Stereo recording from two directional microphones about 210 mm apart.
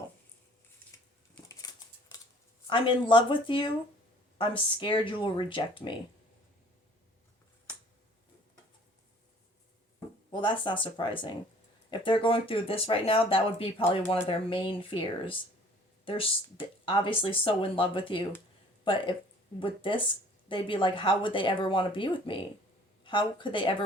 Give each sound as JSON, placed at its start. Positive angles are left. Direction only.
{"t": 1.5, "sound": "scissors", "side_deg": 15}
{"t": 2.6, "sound": "speech", "side_deg": 25}
{"t": 10.3, "sound": "speech", "side_deg": 20}
{"t": 16.8, "sound": "speech", "side_deg": 25}